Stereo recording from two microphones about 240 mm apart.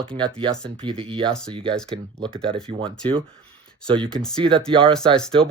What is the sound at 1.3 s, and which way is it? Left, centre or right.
Speech, centre.